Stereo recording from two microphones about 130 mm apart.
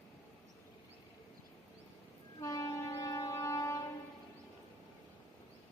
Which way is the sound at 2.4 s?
30° left (ahead or behind).